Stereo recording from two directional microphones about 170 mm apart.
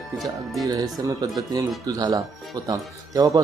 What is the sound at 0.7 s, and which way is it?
A man's voice, 20° right (ahead or behind).